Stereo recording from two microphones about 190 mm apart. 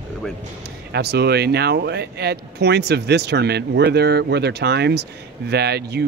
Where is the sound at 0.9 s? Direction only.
60° right (ahead or behind).